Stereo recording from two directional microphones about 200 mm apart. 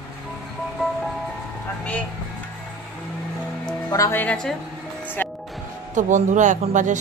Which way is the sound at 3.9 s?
15° left (ahead or behind).